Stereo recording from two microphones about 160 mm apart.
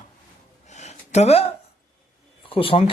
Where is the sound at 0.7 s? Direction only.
45° left (ahead or behind).